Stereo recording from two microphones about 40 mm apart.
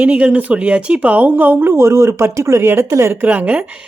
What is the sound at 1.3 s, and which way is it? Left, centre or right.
Speech, right.